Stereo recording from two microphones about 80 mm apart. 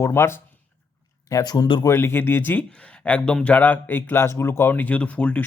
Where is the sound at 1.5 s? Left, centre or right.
Left.